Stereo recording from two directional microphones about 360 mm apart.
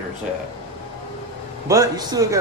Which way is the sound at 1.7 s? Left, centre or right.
Centre.